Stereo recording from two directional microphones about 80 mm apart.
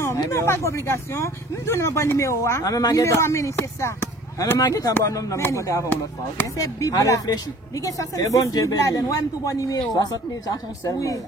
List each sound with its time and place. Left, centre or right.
0.3 s speech: left
4.6 s speech: left